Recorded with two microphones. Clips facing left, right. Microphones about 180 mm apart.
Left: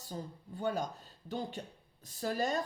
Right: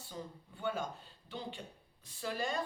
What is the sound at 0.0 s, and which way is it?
Speech, 40° left (ahead or behind).